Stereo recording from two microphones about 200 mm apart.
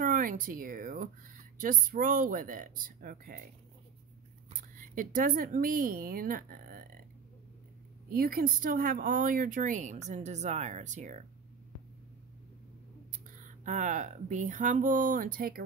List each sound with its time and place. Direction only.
0.0 s speech: 45° right (ahead or behind)
4.6 s speech: 40° right (ahead or behind)
8.1 s speech: 45° right (ahead or behind)
13.4 s speech: 40° right (ahead or behind)